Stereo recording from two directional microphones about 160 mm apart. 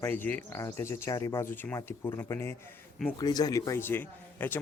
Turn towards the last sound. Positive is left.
turn(degrees=10)  # may be behind; listen again after turning